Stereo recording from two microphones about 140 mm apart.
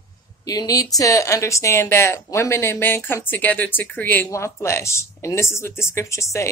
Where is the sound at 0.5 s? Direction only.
25° left (ahead or behind).